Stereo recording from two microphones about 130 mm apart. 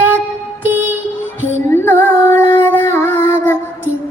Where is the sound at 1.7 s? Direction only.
15° left (ahead or behind).